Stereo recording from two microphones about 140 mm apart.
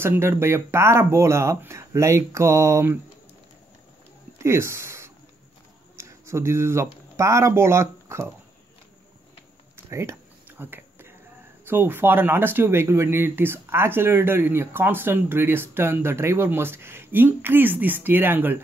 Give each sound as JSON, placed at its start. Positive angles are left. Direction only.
{"t": 0.0, "sound": "speech", "side_deg": -15}
{"t": 4.4, "sound": "a sound", "side_deg": -20}
{"t": 5.9, "sound": "speech", "side_deg": -20}
{"t": 9.8, "sound": "speech", "side_deg": -20}
{"t": 10.6, "sound": "a sound", "side_deg": -15}
{"t": 11.6, "sound": "speech", "side_deg": -15}